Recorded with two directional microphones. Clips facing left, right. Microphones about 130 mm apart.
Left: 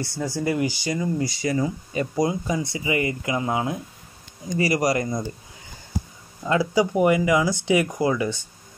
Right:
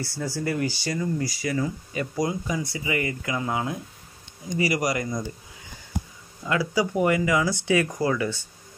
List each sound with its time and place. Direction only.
0.0 s speech: 15° left (ahead or behind)
6.4 s speech: 25° left (ahead or behind)